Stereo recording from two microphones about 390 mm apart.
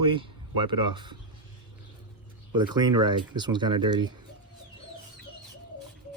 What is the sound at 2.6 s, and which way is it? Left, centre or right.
Speech, centre.